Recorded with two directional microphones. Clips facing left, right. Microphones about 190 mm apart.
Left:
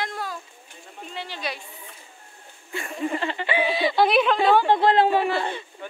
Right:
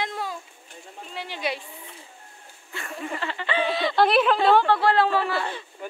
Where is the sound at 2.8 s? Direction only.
20° left (ahead or behind); by 4.7 s 5° left (ahead or behind).